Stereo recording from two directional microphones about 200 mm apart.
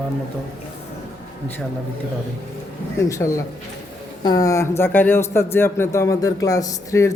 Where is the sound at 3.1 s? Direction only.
15° left (ahead or behind).